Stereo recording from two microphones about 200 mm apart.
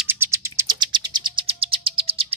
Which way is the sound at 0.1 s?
15° right (ahead or behind).